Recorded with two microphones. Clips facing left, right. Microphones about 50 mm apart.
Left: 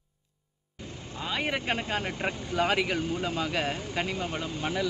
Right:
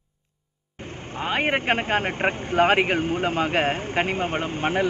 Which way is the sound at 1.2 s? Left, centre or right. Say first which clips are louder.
Right 7 dB; right.